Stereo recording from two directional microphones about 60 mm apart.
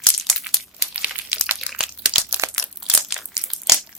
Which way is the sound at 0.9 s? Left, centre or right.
Right.